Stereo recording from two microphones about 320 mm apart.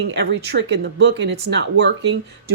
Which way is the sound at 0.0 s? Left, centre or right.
Right.